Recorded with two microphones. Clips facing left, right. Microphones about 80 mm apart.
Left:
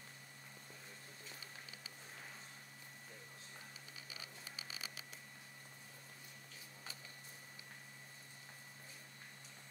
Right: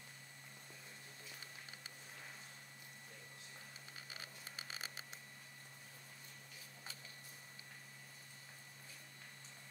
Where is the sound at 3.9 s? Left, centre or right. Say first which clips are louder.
Right 1 dB; right.